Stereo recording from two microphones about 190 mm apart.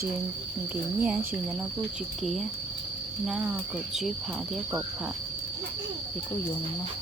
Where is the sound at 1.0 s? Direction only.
5° right (ahead or behind).